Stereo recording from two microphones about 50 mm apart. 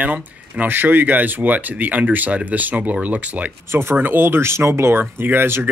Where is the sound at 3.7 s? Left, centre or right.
Right.